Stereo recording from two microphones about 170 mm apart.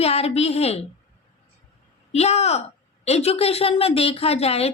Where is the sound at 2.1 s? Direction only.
40° left (ahead or behind).